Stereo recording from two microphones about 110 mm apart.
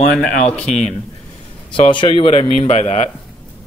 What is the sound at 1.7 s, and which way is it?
Speech, 50° left (ahead or behind).